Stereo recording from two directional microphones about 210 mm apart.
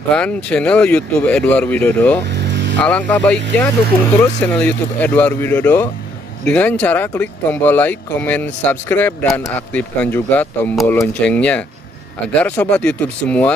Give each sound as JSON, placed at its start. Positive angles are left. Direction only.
{"t": 0.1, "sound": "speech", "side_deg": 5}
{"t": 2.2, "sound": "vehicle", "side_deg": -55}
{"t": 2.8, "sound": "speech", "side_deg": 5}